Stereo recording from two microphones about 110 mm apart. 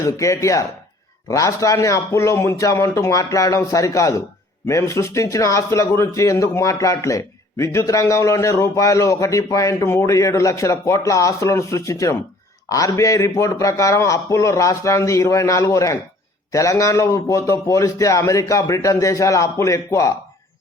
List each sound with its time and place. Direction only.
0.0 s speech: 30° left (ahead or behind)